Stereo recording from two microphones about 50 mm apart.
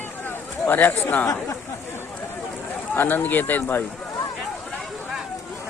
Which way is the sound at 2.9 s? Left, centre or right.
Left.